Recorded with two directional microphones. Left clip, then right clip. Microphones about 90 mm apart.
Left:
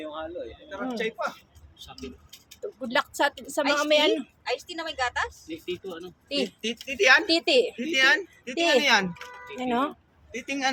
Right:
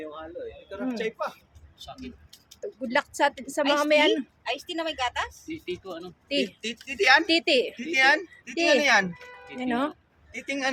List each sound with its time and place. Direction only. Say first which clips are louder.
0.0 s a sound: left 3 dB; 30° left (ahead or behind)
0.9 s speech: left 1 dB; 5° left (ahead or behind)
2.0 s a sound: left 2 dB; 5° left (ahead or behind)
2.6 s speech: even; 15° right (ahead or behind)
4.4 s speech: right 1 dB; 70° right (ahead or behind)
6.2 s speech: right 1 dB; 20° right (ahead or behind)
6.6 s speech: left 2 dB; 40° right (ahead or behind)
7.3 s speech: left 1 dB; 15° right (ahead or behind)
7.8 s speech: even; 35° right (ahead or behind)
9.6 s speech: left 1 dB; 10° right (ahead or behind)
10.3 s speech: left 1 dB; 25° right (ahead or behind)